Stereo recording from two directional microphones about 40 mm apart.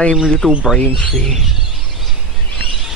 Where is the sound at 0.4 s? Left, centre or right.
Centre.